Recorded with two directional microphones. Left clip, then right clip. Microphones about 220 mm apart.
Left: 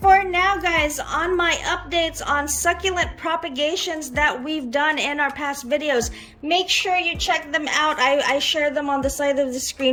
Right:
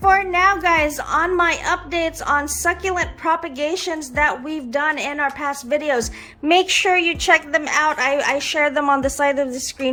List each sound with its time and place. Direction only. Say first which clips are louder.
0.0 s a woman's voice: right 1 dB; 5° right (ahead or behind)
7.5 s a woman's voice: right 2 dB; 5° right (ahead or behind)